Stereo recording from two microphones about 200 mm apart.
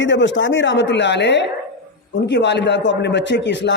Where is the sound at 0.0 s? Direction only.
65° left (ahead or behind).